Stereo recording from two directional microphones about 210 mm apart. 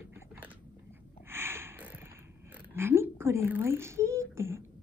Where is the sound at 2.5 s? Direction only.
10° right (ahead or behind).